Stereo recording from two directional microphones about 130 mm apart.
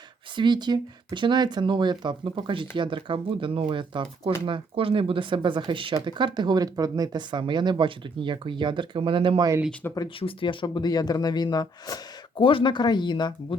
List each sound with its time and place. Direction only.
0.3 s speech: 35° right (ahead or behind)
9.8 s speech: 15° left (ahead or behind)
10.2 s speech: 40° left (ahead or behind)